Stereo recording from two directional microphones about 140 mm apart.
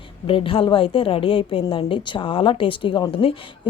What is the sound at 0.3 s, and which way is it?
A woman's voice, 40° left (ahead or behind).